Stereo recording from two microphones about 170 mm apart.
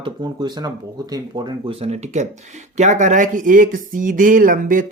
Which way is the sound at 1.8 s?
40° right (ahead or behind).